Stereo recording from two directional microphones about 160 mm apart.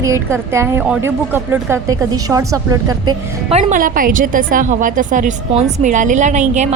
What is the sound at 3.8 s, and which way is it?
A woman's voice, 60° right (ahead or behind).